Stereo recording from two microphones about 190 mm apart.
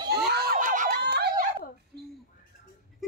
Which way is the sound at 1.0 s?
60° right (ahead or behind).